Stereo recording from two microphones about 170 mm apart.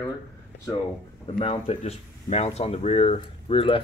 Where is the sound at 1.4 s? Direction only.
35° left (ahead or behind).